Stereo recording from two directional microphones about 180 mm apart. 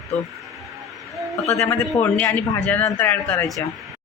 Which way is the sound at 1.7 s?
10° left (ahead or behind).